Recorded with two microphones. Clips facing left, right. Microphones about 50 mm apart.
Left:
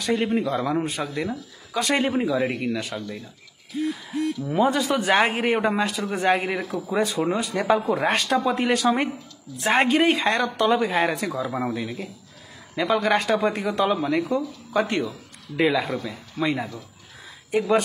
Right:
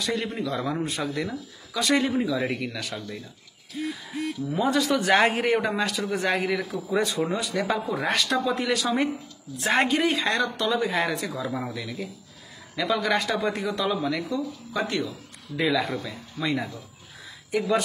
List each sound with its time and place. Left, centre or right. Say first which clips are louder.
0.0 s speech: left 5 dB; left
4.5 s speech: left 2 dB; left
4.8 s a man's voice: even; centre
5.5 s speech: left 2 dB; left
6.9 s a man's voice: left 2 dB; centre
7.3 s a man's voice: left 4 dB; left
15.9 s a man's voice: left 3 dB; centre
17.5 s speech: left 3 dB; left